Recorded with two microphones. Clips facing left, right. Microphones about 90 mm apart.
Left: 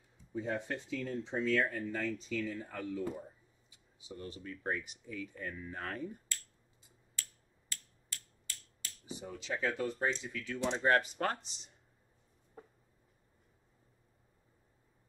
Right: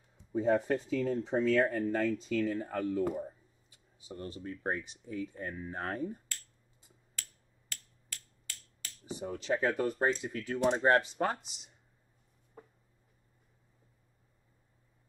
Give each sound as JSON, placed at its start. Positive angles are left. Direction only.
{"t": 0.3, "sound": "speech", "side_deg": -45}
{"t": 4.1, "sound": "speech", "side_deg": -35}
{"t": 7.7, "sound": "a sound", "side_deg": -60}
{"t": 10.2, "sound": "speech", "side_deg": -45}
{"t": 10.8, "sound": "speech", "side_deg": -35}
{"t": 11.3, "sound": "speech", "side_deg": -5}